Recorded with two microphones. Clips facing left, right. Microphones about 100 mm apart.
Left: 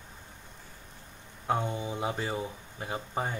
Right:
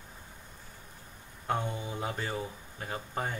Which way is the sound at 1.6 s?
20° left (ahead or behind).